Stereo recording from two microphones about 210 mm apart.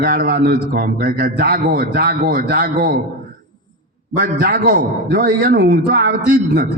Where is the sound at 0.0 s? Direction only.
45° right (ahead or behind).